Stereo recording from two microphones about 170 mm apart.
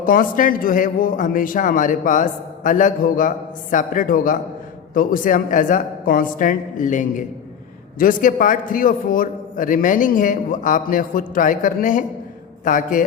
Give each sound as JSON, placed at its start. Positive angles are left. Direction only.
{"t": 0.0, "sound": "a man's voice", "side_deg": 55}